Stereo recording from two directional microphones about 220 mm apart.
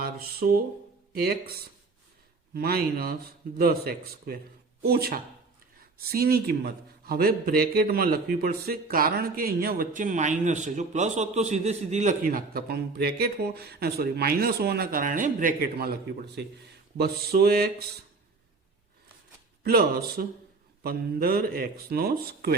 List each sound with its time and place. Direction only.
0.0 s a man's voice: 45° right (ahead or behind)
19.6 s a man's voice: 45° right (ahead or behind)